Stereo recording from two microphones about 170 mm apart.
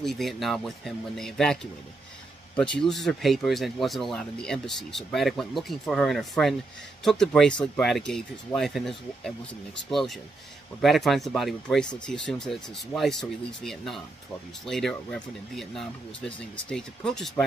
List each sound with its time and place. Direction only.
0.0 s speech: centre (ahead or behind)
2.8 s speech: centre (ahead or behind)